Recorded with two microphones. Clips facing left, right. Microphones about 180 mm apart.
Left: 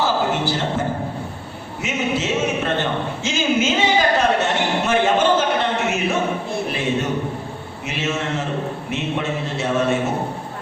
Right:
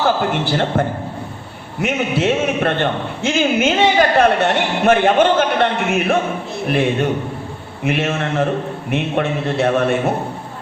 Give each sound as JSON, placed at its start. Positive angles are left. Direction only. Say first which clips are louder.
{"t": 0.4, "sound": "a man's voice", "louder": "right 4 dB", "side_deg": -60}